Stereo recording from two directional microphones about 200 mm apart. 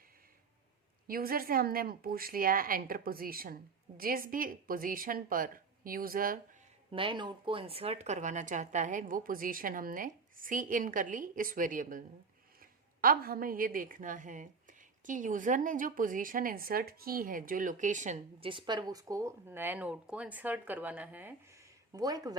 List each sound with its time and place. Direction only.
1.0 s speech: 45° right (ahead or behind)
6.9 s a woman's voice: 25° right (ahead or behind)